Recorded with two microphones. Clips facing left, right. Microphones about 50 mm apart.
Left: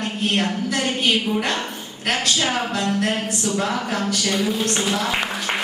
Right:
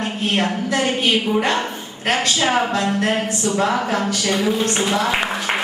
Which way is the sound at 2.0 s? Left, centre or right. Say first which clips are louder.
Right 3 dB; centre.